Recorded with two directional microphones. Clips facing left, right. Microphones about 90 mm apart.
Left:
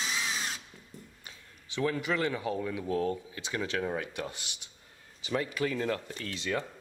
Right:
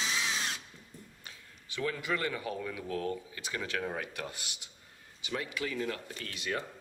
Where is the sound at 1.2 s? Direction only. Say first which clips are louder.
Even; 20° left (ahead or behind).